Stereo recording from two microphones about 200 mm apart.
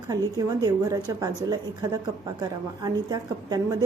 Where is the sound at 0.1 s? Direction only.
15° right (ahead or behind).